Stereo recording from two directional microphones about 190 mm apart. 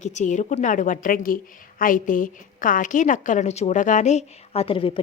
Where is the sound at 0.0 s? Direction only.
40° left (ahead or behind).